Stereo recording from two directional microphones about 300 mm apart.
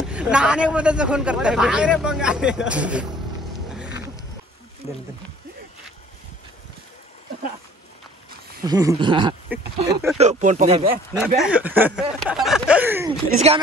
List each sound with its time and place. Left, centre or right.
0.0 s speech: centre
3.7 s roaring cats: centre
8.6 s speech: centre
10.1 s speech: right
11.1 s speech: centre